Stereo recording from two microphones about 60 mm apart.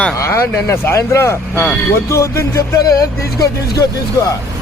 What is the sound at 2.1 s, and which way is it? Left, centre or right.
Speech, left.